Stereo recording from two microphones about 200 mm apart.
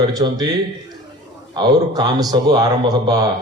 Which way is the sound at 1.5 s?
20° right (ahead or behind).